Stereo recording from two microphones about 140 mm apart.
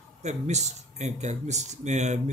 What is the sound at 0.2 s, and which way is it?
Speech, 55° right (ahead or behind).